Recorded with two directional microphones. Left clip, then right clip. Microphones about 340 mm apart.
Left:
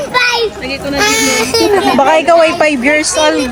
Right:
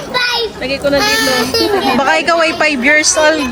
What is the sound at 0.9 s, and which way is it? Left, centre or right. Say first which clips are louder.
Speech: left 2 dB; left.